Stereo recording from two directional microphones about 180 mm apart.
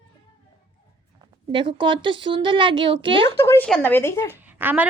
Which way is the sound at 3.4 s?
15° left (ahead or behind).